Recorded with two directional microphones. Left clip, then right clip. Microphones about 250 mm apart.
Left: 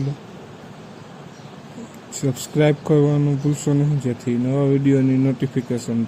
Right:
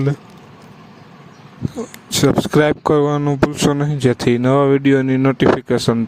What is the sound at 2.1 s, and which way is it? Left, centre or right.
Speech, right.